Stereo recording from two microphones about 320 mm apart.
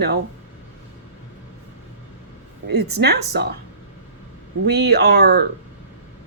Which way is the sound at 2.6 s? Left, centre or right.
Right.